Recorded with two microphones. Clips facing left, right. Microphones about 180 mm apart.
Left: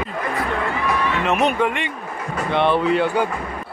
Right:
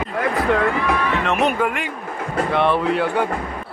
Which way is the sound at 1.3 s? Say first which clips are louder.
Left 1 dB; centre (ahead or behind).